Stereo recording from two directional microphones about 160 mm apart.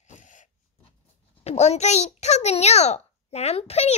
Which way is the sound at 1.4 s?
45° left (ahead or behind).